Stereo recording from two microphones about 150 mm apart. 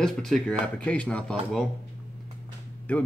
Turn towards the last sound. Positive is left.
turn(degrees=10)  # may be behind; listen again after turning